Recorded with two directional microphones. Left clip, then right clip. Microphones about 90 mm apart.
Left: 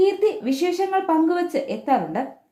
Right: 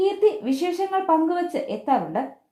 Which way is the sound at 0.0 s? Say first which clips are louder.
Left 1 dB; 30° right (ahead or behind).